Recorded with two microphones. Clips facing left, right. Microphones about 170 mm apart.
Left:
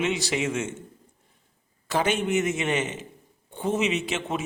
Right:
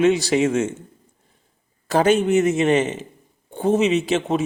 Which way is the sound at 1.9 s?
40° right (ahead or behind).